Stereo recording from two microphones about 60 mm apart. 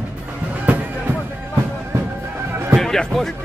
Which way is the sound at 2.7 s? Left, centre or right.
Centre.